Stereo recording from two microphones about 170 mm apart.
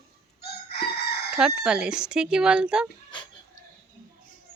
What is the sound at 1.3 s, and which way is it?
Speech, 5° right (ahead or behind).